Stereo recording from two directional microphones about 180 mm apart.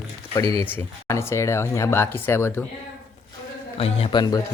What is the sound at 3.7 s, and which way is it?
Speech, 35° left (ahead or behind).